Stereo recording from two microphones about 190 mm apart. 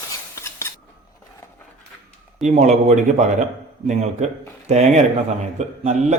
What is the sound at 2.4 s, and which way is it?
A man's voice, 35° right (ahead or behind).